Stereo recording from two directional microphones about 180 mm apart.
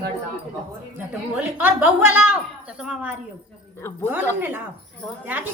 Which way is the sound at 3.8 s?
15° left (ahead or behind).